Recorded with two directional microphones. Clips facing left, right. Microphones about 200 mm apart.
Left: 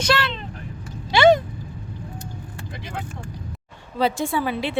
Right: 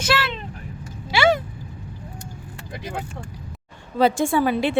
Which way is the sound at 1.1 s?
5° right (ahead or behind).